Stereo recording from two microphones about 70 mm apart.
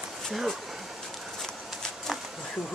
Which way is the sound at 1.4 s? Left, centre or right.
Centre.